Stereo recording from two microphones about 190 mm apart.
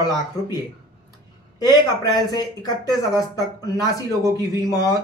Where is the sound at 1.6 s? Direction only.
20° left (ahead or behind).